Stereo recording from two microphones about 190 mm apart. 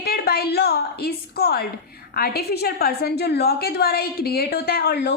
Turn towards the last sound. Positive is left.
turn(degrees=60)  # may be behind; listen again after turning